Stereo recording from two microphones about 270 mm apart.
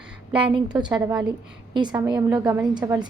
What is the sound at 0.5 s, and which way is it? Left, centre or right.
A woman's voice, centre.